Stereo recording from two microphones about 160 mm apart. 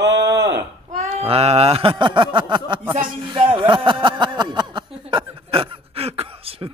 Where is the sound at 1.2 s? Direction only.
40° right (ahead or behind).